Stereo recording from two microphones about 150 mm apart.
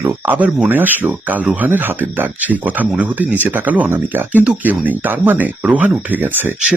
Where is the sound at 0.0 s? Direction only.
10° right (ahead or behind).